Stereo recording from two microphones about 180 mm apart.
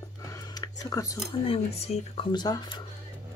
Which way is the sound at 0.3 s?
20° left (ahead or behind).